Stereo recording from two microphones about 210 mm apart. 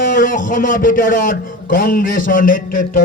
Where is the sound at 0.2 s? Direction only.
40° left (ahead or behind).